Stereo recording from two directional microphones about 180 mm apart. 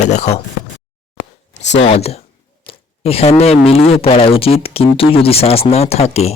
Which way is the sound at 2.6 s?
35° left (ahead or behind).